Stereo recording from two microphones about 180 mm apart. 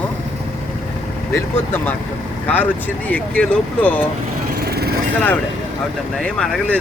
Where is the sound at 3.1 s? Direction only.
10° left (ahead or behind).